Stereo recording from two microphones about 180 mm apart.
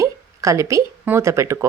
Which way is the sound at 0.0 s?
15° right (ahead or behind).